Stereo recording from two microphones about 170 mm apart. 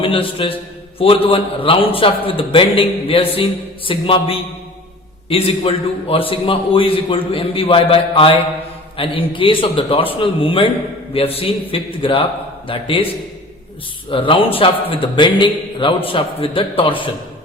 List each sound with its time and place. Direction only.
0.0 s a man's voice: 30° left (ahead or behind)
14.1 s a man's voice: 30° left (ahead or behind)